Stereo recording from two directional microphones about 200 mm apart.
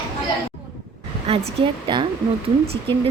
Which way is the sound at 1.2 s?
30° right (ahead or behind).